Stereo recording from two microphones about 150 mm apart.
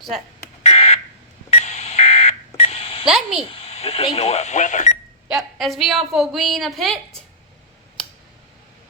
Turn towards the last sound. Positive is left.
turn(degrees=0)  # may be behind; listen again after turning